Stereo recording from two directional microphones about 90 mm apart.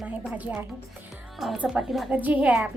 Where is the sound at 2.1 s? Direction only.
15° right (ahead or behind).